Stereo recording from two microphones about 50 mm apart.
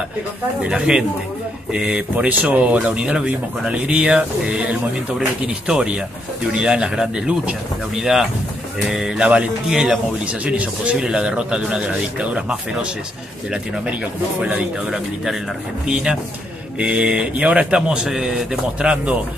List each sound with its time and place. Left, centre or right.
0.6 s speech: centre
7.9 s speech: centre
9.2 s speech: right
10.4 s speech: right
15.9 s speech: centre